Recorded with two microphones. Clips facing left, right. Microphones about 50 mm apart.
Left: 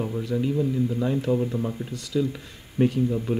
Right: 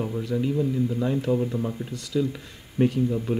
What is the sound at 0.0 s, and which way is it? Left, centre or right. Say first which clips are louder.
Speech: even; centre.